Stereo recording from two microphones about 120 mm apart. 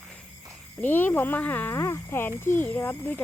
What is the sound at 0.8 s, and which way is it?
Speech, 15° left (ahead or behind).